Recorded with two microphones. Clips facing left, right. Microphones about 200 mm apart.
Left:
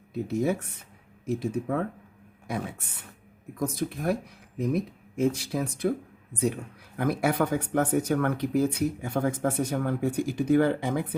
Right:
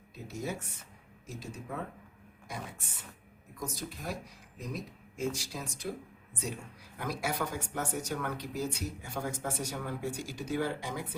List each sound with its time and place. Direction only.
0.1 s speech: 60° left (ahead or behind)